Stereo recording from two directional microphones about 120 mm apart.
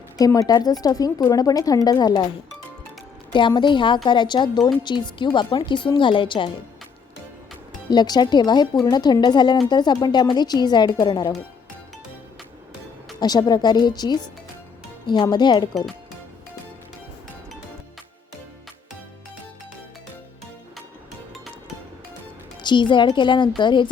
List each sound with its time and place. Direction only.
0.3 s a woman's voice: 30° left (ahead or behind)
3.3 s a woman's voice: 40° left (ahead or behind)
7.9 s a woman's voice: 35° left (ahead or behind)
13.1 s a woman's voice: 35° left (ahead or behind)
22.6 s a woman's voice: 40° left (ahead or behind)